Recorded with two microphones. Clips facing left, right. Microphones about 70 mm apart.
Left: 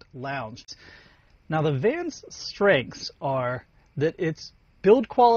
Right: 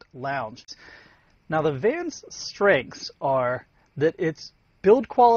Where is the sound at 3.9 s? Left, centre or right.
Right.